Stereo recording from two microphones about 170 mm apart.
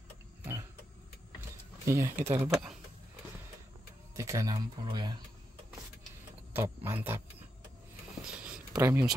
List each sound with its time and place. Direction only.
1.9 s speech: 15° right (ahead or behind)
4.1 s speech: 20° right (ahead or behind)
6.5 s speech: 15° right (ahead or behind)
8.2 s a sound: 5° right (ahead or behind)
8.7 s speech: 15° right (ahead or behind)